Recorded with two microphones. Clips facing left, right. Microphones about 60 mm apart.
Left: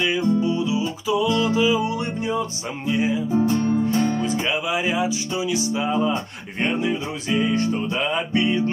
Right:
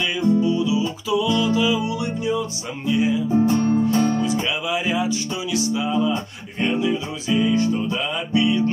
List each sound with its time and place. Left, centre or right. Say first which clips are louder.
0.0 s music: right 1 dB; left
2.9 s music: right 2 dB; left
4.5 s music: even; left
5.8 s music: left 1 dB; left